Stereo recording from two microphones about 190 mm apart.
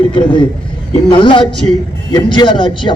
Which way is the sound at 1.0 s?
25° left (ahead or behind).